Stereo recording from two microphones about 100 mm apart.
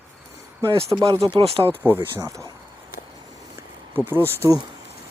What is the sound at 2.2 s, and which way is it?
Speech, 30° right (ahead or behind).